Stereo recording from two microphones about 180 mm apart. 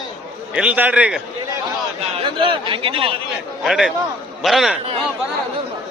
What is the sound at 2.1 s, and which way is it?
Speech, 30° right (ahead or behind).